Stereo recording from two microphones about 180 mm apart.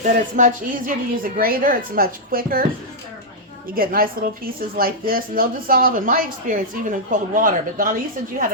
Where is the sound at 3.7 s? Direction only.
55° right (ahead or behind).